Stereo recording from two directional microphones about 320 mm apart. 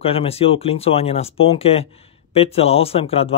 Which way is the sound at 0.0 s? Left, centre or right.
Centre.